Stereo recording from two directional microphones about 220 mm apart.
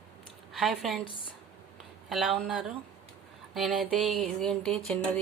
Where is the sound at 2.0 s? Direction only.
Centre (ahead or behind).